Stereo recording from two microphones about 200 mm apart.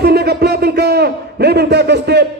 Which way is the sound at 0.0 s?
55° right (ahead or behind).